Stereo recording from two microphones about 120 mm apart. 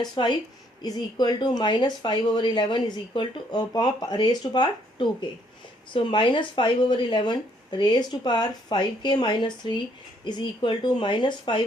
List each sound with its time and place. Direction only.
0.0 s speech: 40° left (ahead or behind)